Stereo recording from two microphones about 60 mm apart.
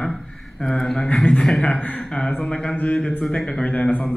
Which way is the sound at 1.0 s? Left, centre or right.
Left.